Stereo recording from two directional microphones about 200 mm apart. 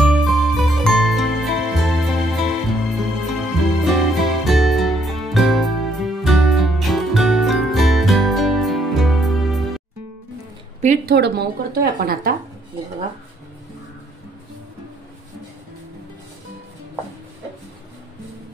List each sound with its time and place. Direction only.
0.0 s music: centre (ahead or behind)
11.1 s speech: 55° right (ahead or behind)